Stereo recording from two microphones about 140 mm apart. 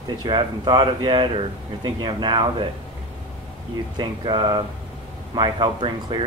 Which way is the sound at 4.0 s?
35° right (ahead or behind).